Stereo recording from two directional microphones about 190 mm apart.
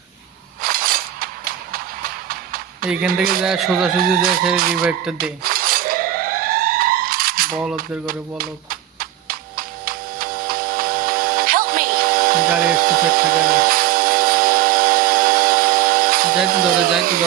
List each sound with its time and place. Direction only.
0.6 s a sound: 50° right (ahead or behind)
2.8 s a man's voice: 5° right (ahead or behind)
3.9 s chicken: 50° right (ahead or behind)
4.8 s a man's voice: 5° right (ahead or behind)
5.1 s cutlery: 50° right (ahead or behind)
7.5 s a man's voice: 5° right (ahead or behind)
7.8 s a sound: 50° right (ahead or behind)